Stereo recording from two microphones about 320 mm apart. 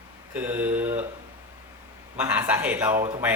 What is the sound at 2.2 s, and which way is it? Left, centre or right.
A man's voice, centre.